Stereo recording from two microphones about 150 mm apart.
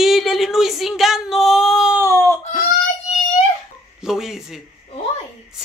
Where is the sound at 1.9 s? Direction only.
20° right (ahead or behind).